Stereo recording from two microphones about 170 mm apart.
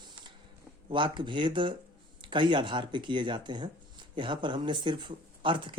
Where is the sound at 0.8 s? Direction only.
30° right (ahead or behind).